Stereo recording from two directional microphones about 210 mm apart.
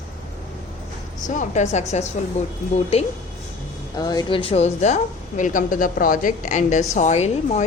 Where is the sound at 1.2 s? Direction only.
35° left (ahead or behind).